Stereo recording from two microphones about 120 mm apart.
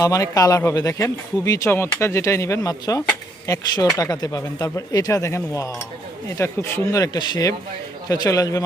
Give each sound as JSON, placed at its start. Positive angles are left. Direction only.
{"t": 0.0, "sound": "speech", "side_deg": 30}